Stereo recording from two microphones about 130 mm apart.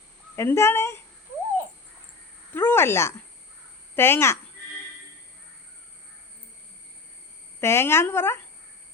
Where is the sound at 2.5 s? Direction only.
15° left (ahead or behind).